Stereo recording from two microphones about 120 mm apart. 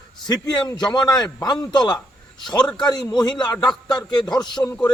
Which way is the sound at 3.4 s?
35° left (ahead or behind).